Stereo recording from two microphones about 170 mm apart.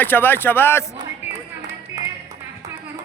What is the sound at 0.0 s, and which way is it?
Speech, 10° left (ahead or behind).